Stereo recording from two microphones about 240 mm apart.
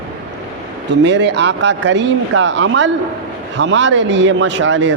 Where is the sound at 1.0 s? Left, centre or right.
Right.